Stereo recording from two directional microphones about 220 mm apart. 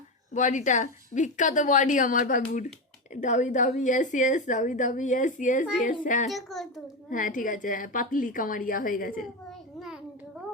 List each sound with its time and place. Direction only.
0.3 s a woman's voice: 35° left (ahead or behind)
6.2 s a child's voice: centre (ahead or behind)
7.1 s a woman's voice: 35° left (ahead or behind)
9.5 s a sound: centre (ahead or behind)